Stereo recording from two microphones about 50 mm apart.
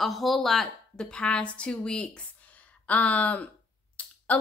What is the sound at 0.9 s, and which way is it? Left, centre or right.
A woman's voice, centre.